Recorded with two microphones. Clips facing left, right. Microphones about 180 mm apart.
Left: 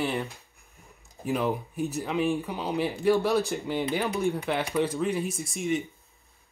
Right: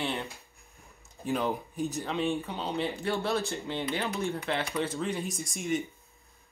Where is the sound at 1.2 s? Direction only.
5° left (ahead or behind).